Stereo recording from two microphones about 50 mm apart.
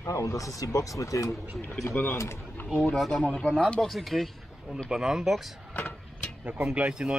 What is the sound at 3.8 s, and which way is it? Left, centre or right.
Speech, centre.